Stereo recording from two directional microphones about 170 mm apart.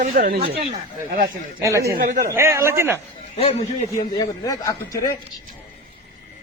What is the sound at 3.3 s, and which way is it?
Speech, 40° left (ahead or behind).